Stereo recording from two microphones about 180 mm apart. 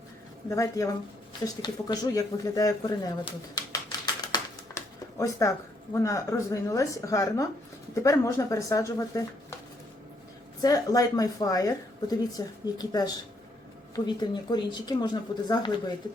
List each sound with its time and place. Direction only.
0.5 s speech: 15° left (ahead or behind)
10.6 s speech: 20° left (ahead or behind)